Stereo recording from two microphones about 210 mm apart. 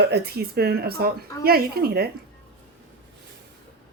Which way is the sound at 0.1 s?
50° right (ahead or behind).